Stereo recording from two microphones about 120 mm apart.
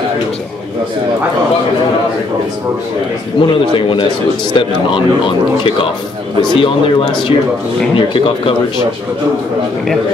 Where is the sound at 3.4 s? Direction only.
45° left (ahead or behind).